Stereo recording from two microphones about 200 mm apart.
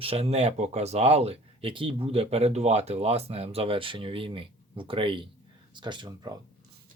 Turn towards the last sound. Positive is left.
turn(degrees=-20)  # may be behind; listen again after turning